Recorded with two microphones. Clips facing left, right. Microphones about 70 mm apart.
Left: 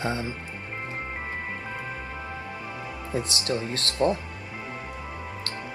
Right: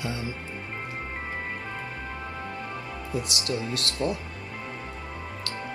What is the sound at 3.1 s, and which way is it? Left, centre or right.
Speech, left.